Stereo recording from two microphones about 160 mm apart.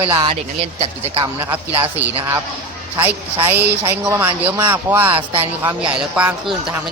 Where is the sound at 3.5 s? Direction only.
15° right (ahead or behind).